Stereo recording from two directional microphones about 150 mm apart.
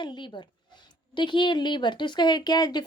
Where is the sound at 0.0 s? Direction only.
30° left (ahead or behind).